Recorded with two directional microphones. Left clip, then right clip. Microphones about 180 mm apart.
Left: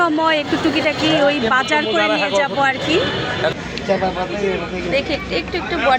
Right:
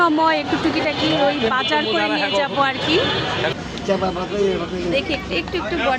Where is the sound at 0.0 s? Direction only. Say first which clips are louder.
Even; centre (ahead or behind).